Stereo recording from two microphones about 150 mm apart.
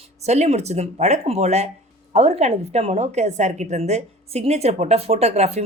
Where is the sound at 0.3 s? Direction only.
50° right (ahead or behind).